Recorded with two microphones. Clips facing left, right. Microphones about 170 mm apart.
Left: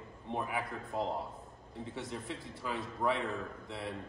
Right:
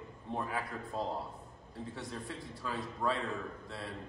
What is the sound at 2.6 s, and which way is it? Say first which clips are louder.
Speech: left 1 dB; 20° left (ahead or behind).